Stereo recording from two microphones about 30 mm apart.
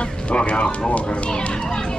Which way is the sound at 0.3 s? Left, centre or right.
Left.